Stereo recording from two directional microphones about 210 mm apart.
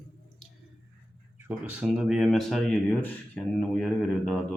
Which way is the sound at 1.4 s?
5° right (ahead or behind).